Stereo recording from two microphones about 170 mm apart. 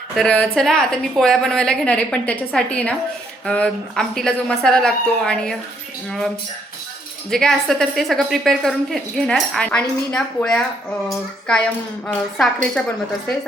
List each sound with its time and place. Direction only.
0.2 s a woman's voice: 5° left (ahead or behind)
12.0 s a woman's voice: 5° left (ahead or behind)